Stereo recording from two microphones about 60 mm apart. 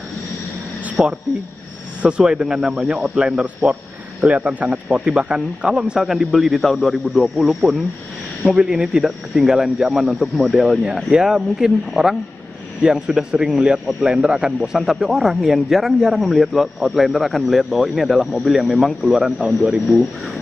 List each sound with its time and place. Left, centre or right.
1.0 s speech: centre